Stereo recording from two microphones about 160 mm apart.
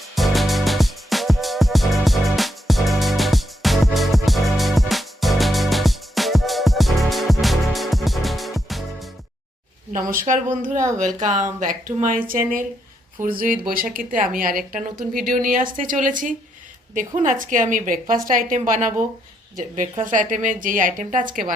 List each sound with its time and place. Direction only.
0.2 s music: centre (ahead or behind)
10.2 s a woman's voice: 55° right (ahead or behind)